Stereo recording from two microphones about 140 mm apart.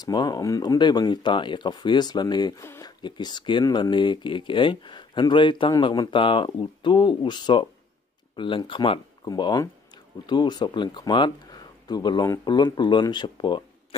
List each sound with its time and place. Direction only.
0.0 s speech: 30° left (ahead or behind)
2.6 s speech: 20° left (ahead or behind)
3.0 s speech: 30° left (ahead or behind)